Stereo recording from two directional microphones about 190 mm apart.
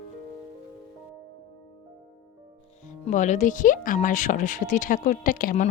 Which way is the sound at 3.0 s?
40° left (ahead or behind).